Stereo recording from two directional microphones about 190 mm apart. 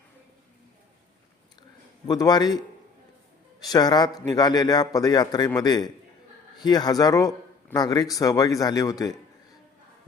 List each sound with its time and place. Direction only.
2.0 s speech: 20° left (ahead or behind)
3.6 s speech: 20° left (ahead or behind)